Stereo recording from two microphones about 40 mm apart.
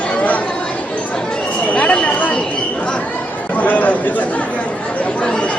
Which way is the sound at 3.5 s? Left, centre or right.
Left.